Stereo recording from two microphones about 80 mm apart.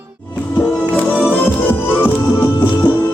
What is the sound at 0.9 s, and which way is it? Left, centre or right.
Music, left.